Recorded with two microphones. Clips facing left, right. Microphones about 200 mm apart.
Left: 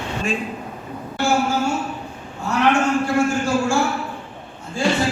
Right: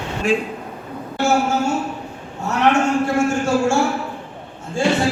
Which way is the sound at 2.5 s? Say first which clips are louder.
Right 1 dB; 25° right (ahead or behind).